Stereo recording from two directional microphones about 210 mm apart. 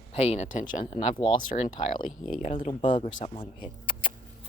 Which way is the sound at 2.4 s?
35° left (ahead or behind).